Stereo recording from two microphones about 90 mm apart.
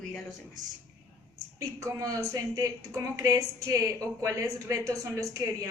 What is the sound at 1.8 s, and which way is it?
Speech, 40° right (ahead or behind).